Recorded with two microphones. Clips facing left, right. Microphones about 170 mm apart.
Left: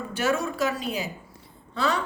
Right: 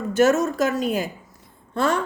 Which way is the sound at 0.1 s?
45° right (ahead or behind).